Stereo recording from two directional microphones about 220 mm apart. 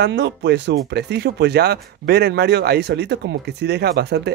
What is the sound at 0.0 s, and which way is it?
Speech, 50° right (ahead or behind).